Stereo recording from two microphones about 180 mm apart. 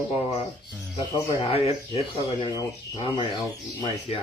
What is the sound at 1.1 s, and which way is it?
Speech, 30° left (ahead or behind).